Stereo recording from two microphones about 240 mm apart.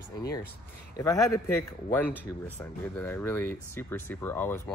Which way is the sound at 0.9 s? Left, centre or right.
Centre.